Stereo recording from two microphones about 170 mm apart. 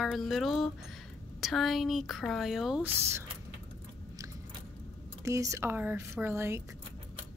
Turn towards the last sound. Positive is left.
turn(degrees=-15)  # may be behind; listen again after turning